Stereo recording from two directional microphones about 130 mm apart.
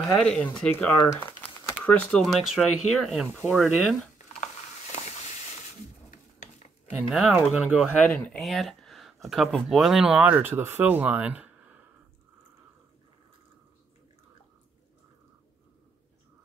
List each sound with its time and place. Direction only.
0.0 s speech: 5° left (ahead or behind)
1.1 s crumpling: 15° left (ahead or behind)
1.9 s speech: 10° left (ahead or behind)
6.0 s a sound: 70° left (ahead or behind)
7.1 s speech: centre (ahead or behind)
8.0 s speech: 10° left (ahead or behind); by 11.8 s 10° right (ahead or behind)